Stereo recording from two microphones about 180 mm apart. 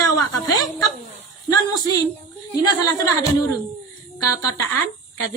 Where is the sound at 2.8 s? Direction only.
20° left (ahead or behind).